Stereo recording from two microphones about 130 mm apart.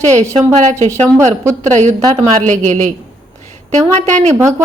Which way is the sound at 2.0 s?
30° right (ahead or behind).